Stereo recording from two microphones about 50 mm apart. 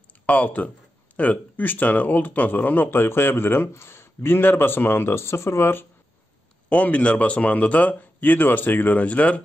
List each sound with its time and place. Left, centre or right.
0.3 s speech: left
3.7 s speech: left
4.4 s speech: left
6.7 s speech: left